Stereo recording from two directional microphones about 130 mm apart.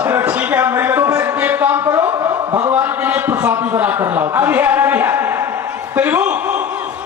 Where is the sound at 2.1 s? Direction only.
25° right (ahead or behind).